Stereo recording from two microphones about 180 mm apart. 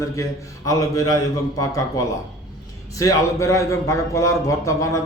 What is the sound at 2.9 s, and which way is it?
A man's voice, 15° left (ahead or behind).